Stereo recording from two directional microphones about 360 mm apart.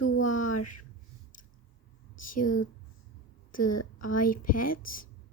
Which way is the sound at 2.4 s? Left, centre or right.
Left.